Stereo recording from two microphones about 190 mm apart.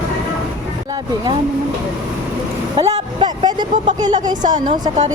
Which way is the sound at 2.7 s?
25° right (ahead or behind).